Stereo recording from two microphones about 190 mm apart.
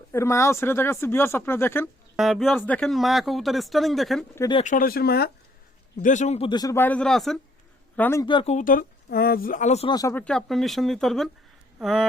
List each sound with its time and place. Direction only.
0.1 s speech: 15° left (ahead or behind)
2.1 s speech: centre (ahead or behind)
4.4 s speech: 25° left (ahead or behind)
4.6 s speech: 45° left (ahead or behind)
6.0 s a man's voice: 40° left (ahead or behind)
6.5 s speech: 20° left (ahead or behind)
8.3 s speech: 25° left (ahead or behind)
8.5 s speech: 45° left (ahead or behind)
9.9 s speech: 15° left (ahead or behind)
10.2 s speech: centre (ahead or behind)